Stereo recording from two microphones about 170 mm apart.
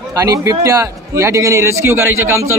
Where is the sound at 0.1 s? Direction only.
20° right (ahead or behind).